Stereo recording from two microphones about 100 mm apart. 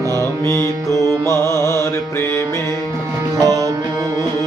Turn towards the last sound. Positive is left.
turn(degrees=-35)  # may be behind; listen again after turning